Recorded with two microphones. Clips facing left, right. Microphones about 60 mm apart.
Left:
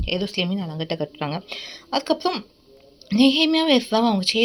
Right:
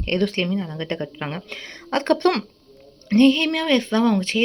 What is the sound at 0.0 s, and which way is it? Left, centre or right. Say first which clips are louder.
A woman's voice: right 3 dB; right.